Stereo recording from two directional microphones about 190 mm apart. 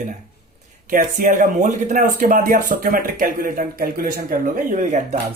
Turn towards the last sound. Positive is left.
turn(degrees=-40)  # may be behind; listen again after turning